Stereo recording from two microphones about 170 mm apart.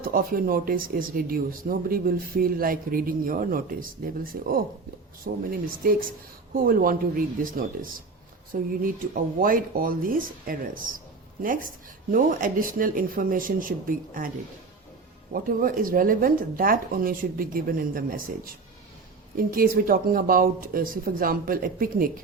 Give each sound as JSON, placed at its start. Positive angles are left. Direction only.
{"t": 0.0, "sound": "speech", "side_deg": -60}
{"t": 15.3, "sound": "speech", "side_deg": -55}
{"t": 19.4, "sound": "speech", "side_deg": -55}